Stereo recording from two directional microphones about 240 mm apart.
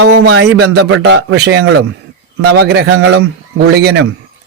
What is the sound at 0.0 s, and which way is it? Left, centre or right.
A man's voice, right.